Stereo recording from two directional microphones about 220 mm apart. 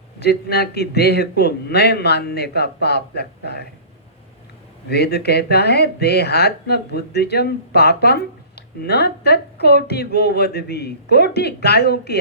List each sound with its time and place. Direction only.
0.2 s speech: 50° left (ahead or behind)
4.9 s speech: 50° left (ahead or behind)